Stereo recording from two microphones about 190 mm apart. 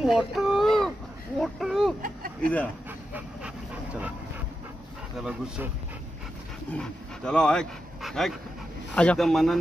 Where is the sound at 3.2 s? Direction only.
5° right (ahead or behind).